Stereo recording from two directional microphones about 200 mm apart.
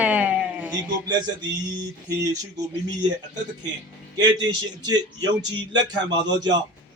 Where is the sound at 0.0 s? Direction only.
5° right (ahead or behind).